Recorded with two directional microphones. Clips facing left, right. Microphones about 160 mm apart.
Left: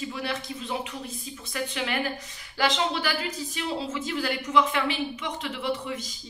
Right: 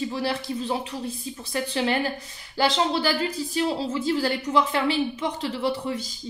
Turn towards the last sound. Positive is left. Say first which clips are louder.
# right 4 dB
turn(degrees=-30)  # may be behind; listen again after turning